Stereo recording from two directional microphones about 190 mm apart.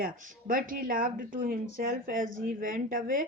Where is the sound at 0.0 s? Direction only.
45° right (ahead or behind).